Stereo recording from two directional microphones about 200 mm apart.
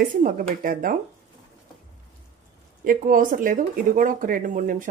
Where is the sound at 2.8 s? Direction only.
45° right (ahead or behind).